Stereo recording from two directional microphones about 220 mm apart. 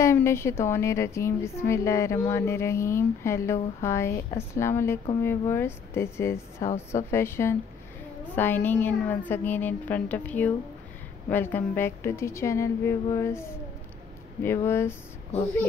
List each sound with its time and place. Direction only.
0.0 s a woman's voice: 10° left (ahead or behind)